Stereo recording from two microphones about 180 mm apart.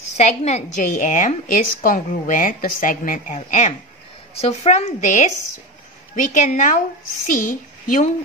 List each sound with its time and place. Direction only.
0.2 s a woman's voice: 40° left (ahead or behind)